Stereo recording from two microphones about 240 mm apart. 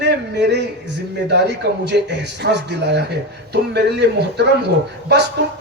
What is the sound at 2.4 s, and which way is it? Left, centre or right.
A man's voice, right.